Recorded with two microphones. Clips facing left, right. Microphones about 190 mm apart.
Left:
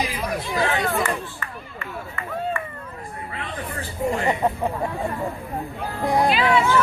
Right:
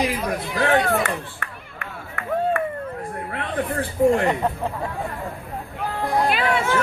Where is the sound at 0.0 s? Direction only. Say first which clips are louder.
Right 3 dB; 65° right (ahead or behind).